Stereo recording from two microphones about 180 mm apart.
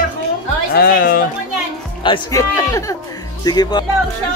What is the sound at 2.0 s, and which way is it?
Speech, 20° left (ahead or behind).